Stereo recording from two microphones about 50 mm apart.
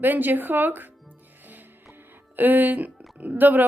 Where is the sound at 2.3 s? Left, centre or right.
Right.